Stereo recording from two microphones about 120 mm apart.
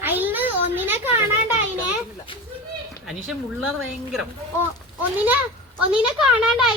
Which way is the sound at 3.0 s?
Centre (ahead or behind).